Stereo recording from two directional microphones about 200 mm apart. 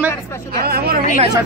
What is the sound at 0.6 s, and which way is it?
Speech, 50° right (ahead or behind).